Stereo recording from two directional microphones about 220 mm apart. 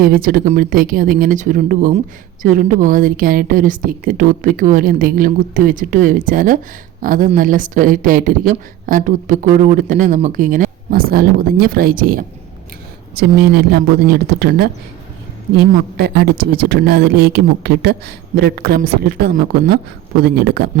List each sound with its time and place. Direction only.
0.0 s a woman's voice: 40° right (ahead or behind)
16.0 s speech: 45° right (ahead or behind)